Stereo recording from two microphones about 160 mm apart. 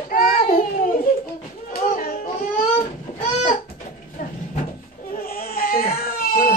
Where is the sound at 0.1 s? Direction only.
60° left (ahead or behind).